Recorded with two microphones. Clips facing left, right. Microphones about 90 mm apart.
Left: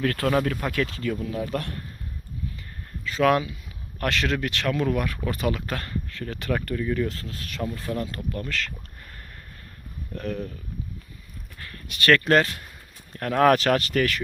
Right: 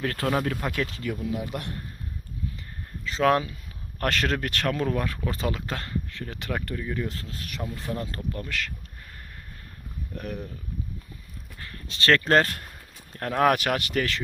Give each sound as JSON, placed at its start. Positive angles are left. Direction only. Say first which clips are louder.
{"t": 0.0, "sound": "speech", "louder": "left 3 dB", "side_deg": -20}
{"t": 3.0, "sound": "speech", "louder": "left 1 dB", "side_deg": -25}
{"t": 8.4, "sound": "speech", "louder": "left 2 dB", "side_deg": -15}
{"t": 10.2, "sound": "speech", "louder": "left 4 dB", "side_deg": -15}
{"t": 11.6, "sound": "speech", "louder": "left 2 dB", "side_deg": -25}
{"t": 13.1, "sound": "speech", "louder": "left 3 dB", "side_deg": -20}